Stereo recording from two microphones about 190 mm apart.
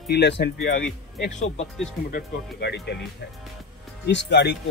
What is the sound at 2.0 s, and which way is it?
Speech, 55° left (ahead or behind).